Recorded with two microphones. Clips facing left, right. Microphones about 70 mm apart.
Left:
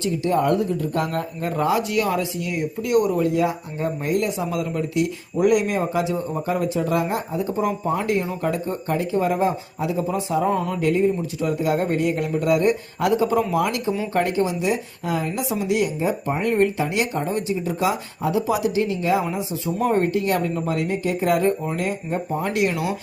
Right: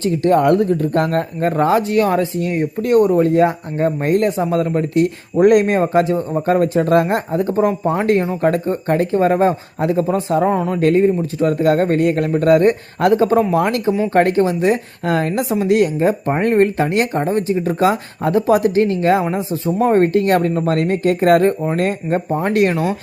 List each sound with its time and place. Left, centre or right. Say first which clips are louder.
0.0 s speech: right 7 dB; right
10.5 s speech: right 5 dB; right
10.8 s speech: right 6 dB; right
19.2 s speech: right 6 dB; right
20.0 s speech: right 7 dB; right